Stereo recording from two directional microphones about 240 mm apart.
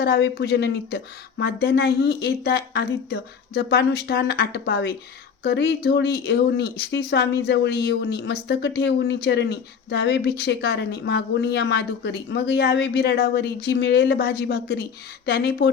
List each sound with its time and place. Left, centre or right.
0.0 s speech: left